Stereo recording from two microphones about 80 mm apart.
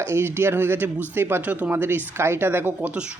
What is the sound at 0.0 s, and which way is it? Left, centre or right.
Speech, right.